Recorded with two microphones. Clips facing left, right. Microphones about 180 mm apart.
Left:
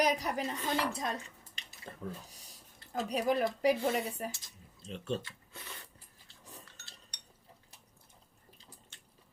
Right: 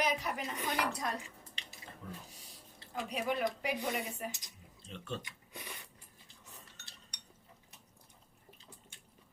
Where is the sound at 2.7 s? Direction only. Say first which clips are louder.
Left 4 dB; 40° left (ahead or behind).